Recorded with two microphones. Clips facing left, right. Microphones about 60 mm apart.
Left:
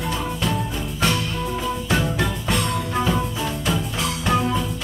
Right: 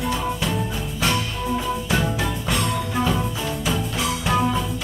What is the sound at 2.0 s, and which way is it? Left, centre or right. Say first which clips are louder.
Music: left 1 dB; centre.